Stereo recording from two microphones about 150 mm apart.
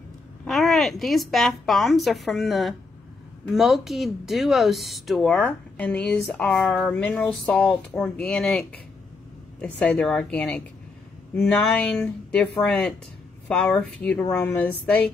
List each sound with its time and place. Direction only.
0.5 s speech: centre (ahead or behind)